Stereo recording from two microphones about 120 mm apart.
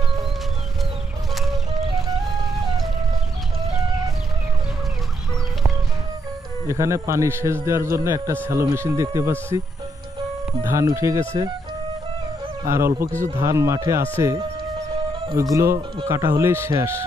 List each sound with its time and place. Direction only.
1.3 s music: centre (ahead or behind)
6.7 s a man's voice: 25° right (ahead or behind)
10.7 s a man's voice: 25° right (ahead or behind)
12.6 s a man's voice: 25° right (ahead or behind)
15.3 s a man's voice: 25° right (ahead or behind)